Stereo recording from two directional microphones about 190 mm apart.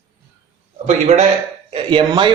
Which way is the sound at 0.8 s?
35° right (ahead or behind).